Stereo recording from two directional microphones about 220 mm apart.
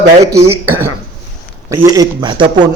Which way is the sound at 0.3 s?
15° right (ahead or behind).